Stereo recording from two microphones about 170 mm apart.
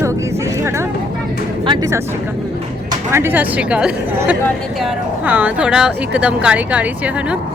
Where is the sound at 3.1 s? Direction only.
10° right (ahead or behind).